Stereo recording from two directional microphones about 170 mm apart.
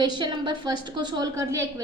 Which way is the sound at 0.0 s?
25° right (ahead or behind).